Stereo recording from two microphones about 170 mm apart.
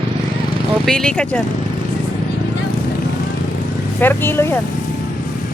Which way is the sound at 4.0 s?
10° left (ahead or behind).